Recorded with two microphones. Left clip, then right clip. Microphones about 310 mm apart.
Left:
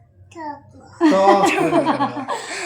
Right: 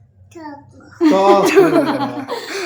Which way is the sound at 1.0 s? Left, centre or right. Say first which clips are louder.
Right 2 dB; centre.